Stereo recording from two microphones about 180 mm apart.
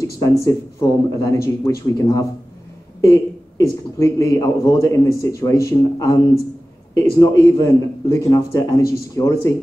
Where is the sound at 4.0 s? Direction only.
15° left (ahead or behind).